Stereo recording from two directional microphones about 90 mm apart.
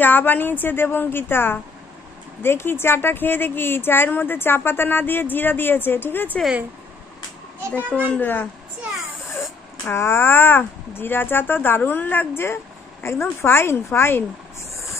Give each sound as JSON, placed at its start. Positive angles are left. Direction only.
{"t": 0.0, "sound": "a woman's voice", "side_deg": 20}
{"t": 7.7, "sound": "a child's voice", "side_deg": 15}
{"t": 9.8, "sound": "a woman's voice", "side_deg": 30}